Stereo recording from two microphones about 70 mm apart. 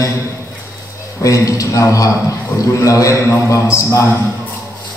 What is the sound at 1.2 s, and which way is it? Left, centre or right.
A man's voice, left.